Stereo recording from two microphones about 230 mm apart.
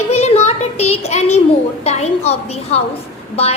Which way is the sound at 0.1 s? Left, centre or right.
Left.